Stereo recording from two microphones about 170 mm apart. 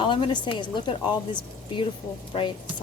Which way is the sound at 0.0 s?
30° left (ahead or behind).